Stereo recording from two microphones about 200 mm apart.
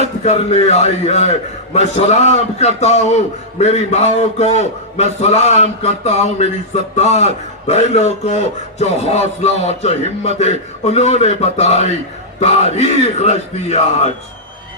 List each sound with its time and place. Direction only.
0.3 s a man's voice: 35° left (ahead or behind)